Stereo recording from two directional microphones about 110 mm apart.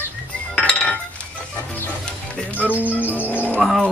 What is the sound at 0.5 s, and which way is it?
Cutlery, 10° left (ahead or behind).